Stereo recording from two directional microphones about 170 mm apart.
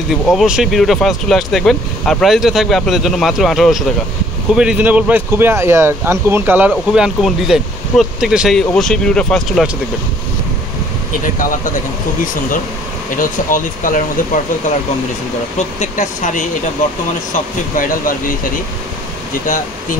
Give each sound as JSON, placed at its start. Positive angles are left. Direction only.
{"t": 0.1, "sound": "speech", "side_deg": 0}
{"t": 13.2, "sound": "speech", "side_deg": 50}
{"t": 15.8, "sound": "speech", "side_deg": 45}